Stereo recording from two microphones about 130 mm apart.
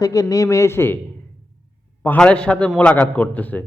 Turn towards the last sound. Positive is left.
turn(degrees=10)  # may be behind; listen again after turning